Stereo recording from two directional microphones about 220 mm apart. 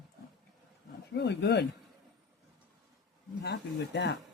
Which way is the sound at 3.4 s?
50° left (ahead or behind).